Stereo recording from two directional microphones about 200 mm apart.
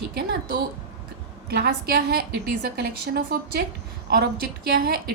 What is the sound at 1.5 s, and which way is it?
A woman's voice, 50° right (ahead or behind).